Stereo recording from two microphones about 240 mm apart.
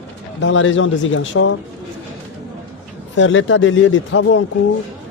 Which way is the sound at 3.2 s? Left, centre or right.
Left.